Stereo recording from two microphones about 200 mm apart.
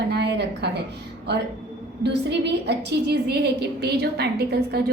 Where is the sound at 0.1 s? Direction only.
55° right (ahead or behind).